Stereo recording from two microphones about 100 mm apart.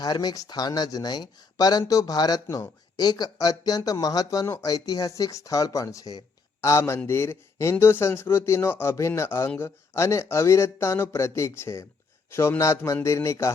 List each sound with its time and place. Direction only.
0.0 s speech: 40° left (ahead or behind)